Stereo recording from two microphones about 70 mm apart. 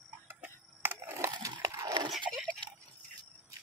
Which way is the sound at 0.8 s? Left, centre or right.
Right.